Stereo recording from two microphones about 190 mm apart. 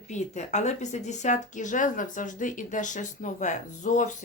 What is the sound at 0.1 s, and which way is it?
Speech, 40° left (ahead or behind).